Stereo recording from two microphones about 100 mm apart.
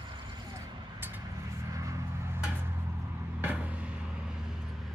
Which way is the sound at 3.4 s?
15° right (ahead or behind).